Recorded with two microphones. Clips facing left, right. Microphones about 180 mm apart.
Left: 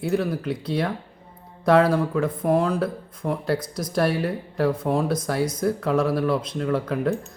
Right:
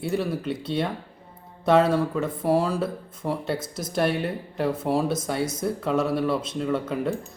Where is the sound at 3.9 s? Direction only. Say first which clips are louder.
Left 2 dB; centre (ahead or behind).